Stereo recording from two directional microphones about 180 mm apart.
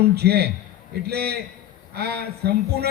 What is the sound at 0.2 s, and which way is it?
A man's voice, 60° right (ahead or behind).